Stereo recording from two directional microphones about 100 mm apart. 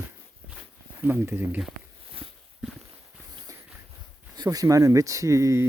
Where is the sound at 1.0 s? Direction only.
20° right (ahead or behind).